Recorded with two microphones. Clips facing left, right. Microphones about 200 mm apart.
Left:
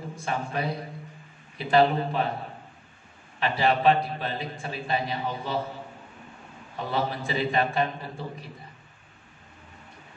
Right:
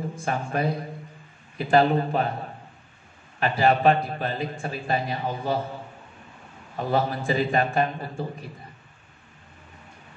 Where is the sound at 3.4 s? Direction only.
45° right (ahead or behind).